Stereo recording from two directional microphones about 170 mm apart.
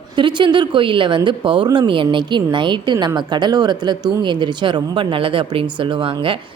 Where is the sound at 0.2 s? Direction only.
30° right (ahead or behind).